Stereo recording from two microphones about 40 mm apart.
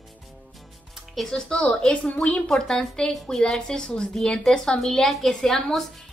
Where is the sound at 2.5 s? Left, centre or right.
Centre.